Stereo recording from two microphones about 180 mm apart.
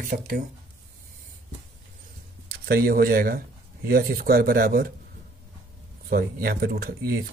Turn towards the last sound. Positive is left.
turn(degrees=-55)  # may be behind; listen again after turning